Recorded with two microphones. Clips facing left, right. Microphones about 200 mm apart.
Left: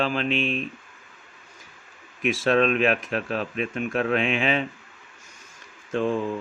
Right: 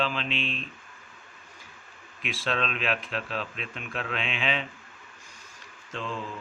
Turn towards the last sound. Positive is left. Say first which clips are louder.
# left 11 dB
turn(degrees=55)  # may be behind; listen again after turning